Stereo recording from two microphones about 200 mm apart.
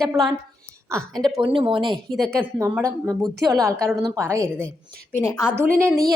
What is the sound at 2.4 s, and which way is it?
A woman's voice, 15° right (ahead or behind).